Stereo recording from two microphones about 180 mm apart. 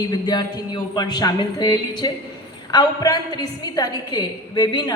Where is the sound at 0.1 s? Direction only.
25° left (ahead or behind).